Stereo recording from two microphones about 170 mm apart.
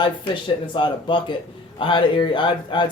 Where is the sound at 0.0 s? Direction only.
25° left (ahead or behind).